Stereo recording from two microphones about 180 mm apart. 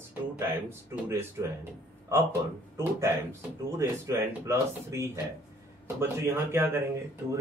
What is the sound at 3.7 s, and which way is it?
Speech, 15° right (ahead or behind).